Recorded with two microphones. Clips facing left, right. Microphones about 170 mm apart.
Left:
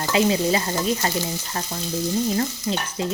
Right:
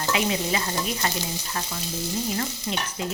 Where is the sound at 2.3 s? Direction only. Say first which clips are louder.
Left 5 dB; 30° left (ahead or behind).